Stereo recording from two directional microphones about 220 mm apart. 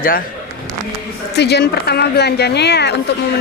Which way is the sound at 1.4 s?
50° left (ahead or behind).